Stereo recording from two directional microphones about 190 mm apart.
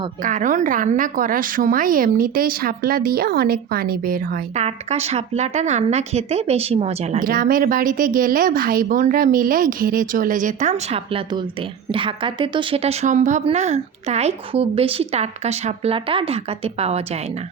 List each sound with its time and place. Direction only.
0.2 s a woman's voice: 45° right (ahead or behind)
4.6 s a woman's voice: 35° right (ahead or behind)
7.3 s a woman's voice: 50° right (ahead or behind)